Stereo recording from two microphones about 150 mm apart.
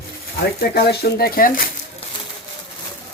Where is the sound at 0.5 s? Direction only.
90° left.